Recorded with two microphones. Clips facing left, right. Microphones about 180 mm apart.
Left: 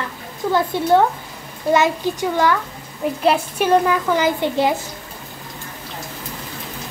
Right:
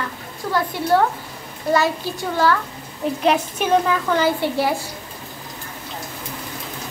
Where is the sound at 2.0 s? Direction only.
20° left (ahead or behind).